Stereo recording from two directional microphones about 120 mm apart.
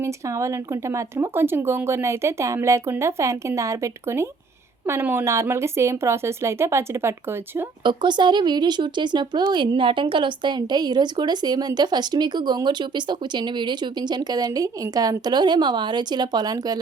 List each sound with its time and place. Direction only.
0.0 s speech: 25° right (ahead or behind)
7.9 s speech: 40° right (ahead or behind)